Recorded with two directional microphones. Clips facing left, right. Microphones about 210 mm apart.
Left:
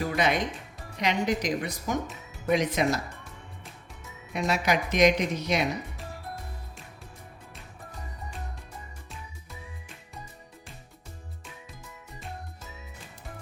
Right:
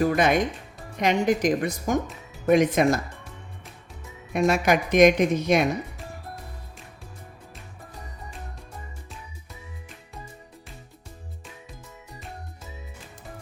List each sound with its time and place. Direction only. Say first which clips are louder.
0.0 s a woman's voice: right 6 dB; 50° right (ahead or behind)
4.3 s a woman's voice: right 6 dB; 50° right (ahead or behind)